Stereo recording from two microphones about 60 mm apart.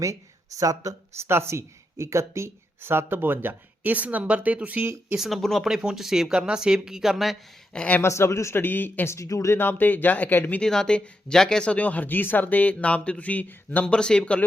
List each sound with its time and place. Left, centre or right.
0.0 s speech: right
1.1 s speech: right
5.1 s speech: centre
5.4 s speech: centre
5.6 s speech: centre
8.0 s speech: left
8.5 s speech: left
9.0 s speech: left
9.5 s speech: left
10.6 s speech: centre; by 13.6 s left
13.7 s speech: centre